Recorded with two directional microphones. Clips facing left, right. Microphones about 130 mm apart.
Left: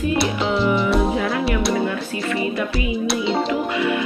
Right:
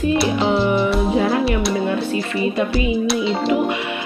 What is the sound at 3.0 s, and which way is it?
Speech, centre (ahead or behind).